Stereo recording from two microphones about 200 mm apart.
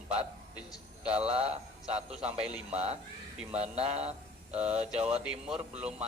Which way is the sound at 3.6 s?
30° right (ahead or behind).